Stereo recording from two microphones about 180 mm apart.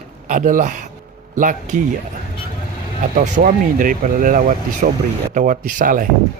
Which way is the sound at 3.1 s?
50° right (ahead or behind).